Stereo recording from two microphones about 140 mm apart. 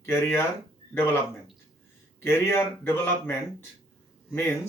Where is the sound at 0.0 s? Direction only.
15° left (ahead or behind).